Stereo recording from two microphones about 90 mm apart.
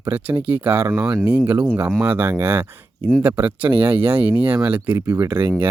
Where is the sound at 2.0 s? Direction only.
25° right (ahead or behind).